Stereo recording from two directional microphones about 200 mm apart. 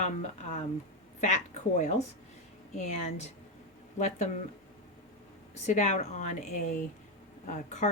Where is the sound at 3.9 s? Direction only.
35° left (ahead or behind).